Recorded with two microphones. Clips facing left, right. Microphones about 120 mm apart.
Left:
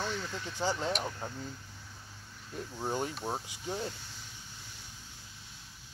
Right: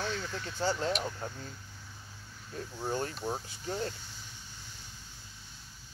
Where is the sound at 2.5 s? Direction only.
10° left (ahead or behind).